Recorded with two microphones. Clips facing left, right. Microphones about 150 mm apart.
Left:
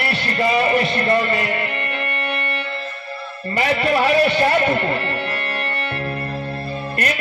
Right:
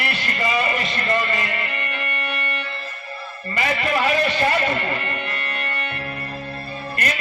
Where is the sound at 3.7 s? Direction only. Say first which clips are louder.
Left 4 dB; 35° left (ahead or behind).